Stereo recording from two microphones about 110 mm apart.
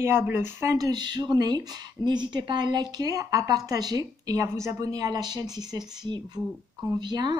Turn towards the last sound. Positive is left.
turn(degrees=-40)  # may be behind; listen again after turning